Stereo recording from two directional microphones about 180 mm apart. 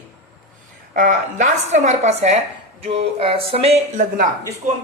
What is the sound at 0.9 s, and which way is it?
A woman's voice, 45° right (ahead or behind).